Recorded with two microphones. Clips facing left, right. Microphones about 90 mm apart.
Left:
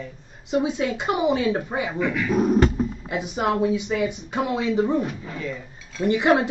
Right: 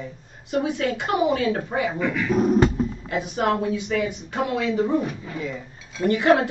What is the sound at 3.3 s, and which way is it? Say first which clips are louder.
Speech: left 1 dB; 15° left (ahead or behind).